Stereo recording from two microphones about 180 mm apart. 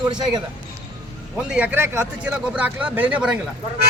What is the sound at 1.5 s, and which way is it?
Speech, 10° right (ahead or behind).